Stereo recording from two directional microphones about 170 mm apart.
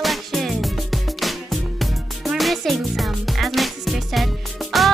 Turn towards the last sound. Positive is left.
turn(degrees=0)  # may be behind; listen again after turning